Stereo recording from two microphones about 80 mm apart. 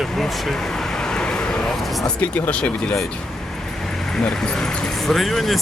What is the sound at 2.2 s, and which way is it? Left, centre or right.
Speech, centre.